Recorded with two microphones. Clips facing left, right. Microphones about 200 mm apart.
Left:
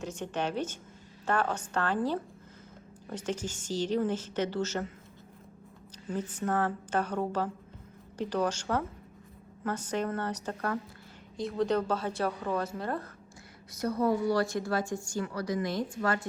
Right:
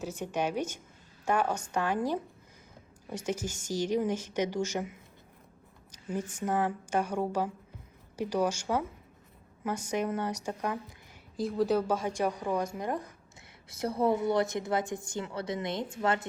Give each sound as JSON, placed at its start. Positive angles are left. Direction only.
{"t": 0.0, "sound": "a woman's voice", "side_deg": -10}
{"t": 6.1, "sound": "a woman's voice", "side_deg": -10}
{"t": 11.3, "sound": "a woman's voice", "side_deg": 0}
{"t": 13.7, "sound": "a woman's voice", "side_deg": -25}